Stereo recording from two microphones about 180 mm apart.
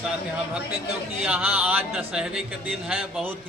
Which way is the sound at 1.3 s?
10° right (ahead or behind).